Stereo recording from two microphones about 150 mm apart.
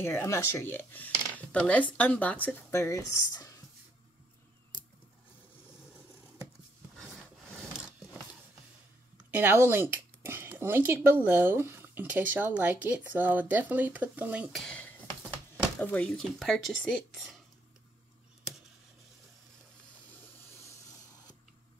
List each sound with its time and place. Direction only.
0.0 s speech: 15° left (ahead or behind)
4.7 s a sound: 30° left (ahead or behind)
7.0 s rub: centre (ahead or behind)
9.3 s speech: 15° right (ahead or behind)
14.5 s a sound: 5° left (ahead or behind)
15.8 s speech: 10° left (ahead or behind)